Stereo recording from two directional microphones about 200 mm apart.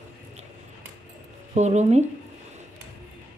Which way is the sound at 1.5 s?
35° right (ahead or behind).